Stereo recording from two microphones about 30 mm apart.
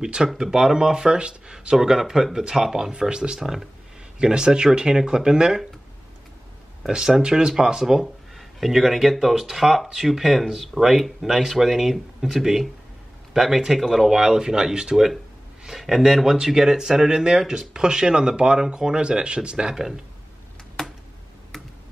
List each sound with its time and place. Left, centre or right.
0.4 s speech: centre
1.8 s speech: centre
2.9 s speech: right
3.3 s speech: centre
4.2 s speech: right
6.9 s speech: right
7.8 s speech: centre
8.4 s speech: centre
11.1 s speech: centre
14.1 s speech: centre
15.8 s speech: centre; by 18.9 s right
18.9 s speech: right
19.7 s speech: centre
20.8 s a sound: centre